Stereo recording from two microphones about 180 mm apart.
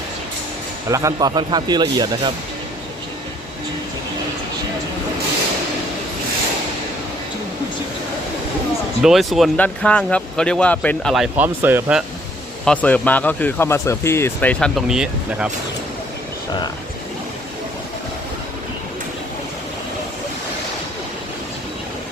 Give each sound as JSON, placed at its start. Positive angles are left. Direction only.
{"t": 0.9, "sound": "speech", "side_deg": -15}
{"t": 9.0, "sound": "speech", "side_deg": 0}
{"t": 12.6, "sound": "speech", "side_deg": 5}